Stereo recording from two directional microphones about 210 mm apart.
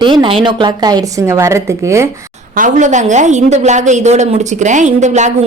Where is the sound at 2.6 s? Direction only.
35° right (ahead or behind).